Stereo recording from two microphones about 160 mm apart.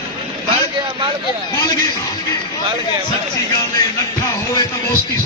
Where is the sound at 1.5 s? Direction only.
25° left (ahead or behind).